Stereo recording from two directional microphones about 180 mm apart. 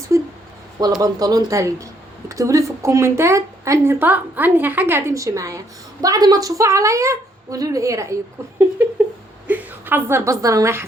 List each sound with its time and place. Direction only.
0.1 s a sound: 15° right (ahead or behind)
1.0 s a woman's voice: 20° right (ahead or behind)
9.5 s a woman's voice: 10° right (ahead or behind)